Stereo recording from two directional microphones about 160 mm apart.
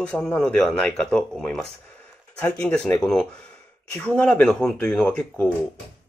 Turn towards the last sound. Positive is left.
turn(degrees=10)  # may be behind; listen again after turning